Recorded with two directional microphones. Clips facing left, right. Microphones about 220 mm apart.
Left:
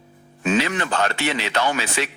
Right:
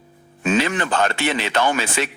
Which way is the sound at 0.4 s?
50° right (ahead or behind).